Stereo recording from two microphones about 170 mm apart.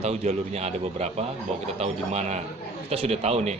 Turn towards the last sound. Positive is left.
turn(degrees=-40)  # may be behind; listen again after turning